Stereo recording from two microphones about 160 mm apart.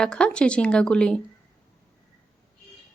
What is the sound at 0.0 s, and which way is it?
Speech, 5° left (ahead or behind).